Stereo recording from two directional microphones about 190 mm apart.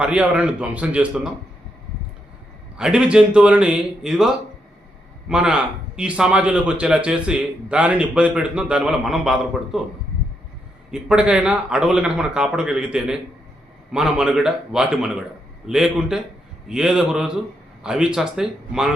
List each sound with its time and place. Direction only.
0.0 s a man's voice: 5° right (ahead or behind)
2.7 s a man's voice: 5° right (ahead or behind)
10.9 s a man's voice: 5° right (ahead or behind)